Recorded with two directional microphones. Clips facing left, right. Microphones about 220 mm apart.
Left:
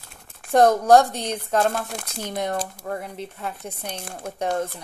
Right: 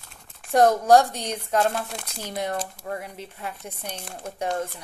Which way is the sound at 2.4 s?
40° left (ahead or behind).